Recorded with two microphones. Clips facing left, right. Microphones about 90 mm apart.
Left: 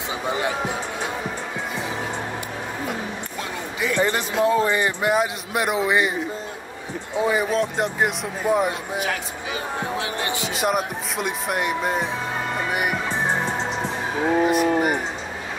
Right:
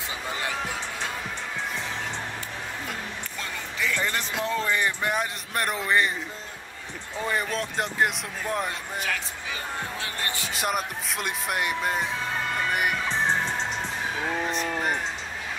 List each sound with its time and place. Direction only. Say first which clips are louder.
0.3 s music: left 7 dB; 20° left (ahead or behind)
3.8 s speech: left 6 dB; 15° left (ahead or behind)
7.2 s speech: left 7 dB; 10° left (ahead or behind)
10.5 s speech: left 5 dB; centre (ahead or behind)
12.4 s music: left 2 dB; 10° left (ahead or behind)
14.2 s speech: left 12 dB; 15° left (ahead or behind)